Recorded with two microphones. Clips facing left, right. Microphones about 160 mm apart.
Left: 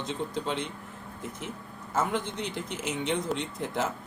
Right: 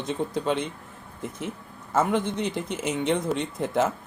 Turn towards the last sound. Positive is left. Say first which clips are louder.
# right 6 dB
turn(degrees=-55)  # may be behind; listen again after turning